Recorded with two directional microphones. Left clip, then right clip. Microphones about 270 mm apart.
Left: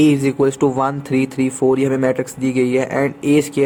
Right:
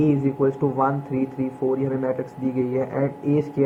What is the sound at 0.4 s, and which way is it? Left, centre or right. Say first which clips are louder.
Speech: left 4 dB; left.